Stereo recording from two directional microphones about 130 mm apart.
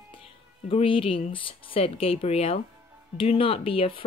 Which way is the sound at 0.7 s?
45° left (ahead or behind).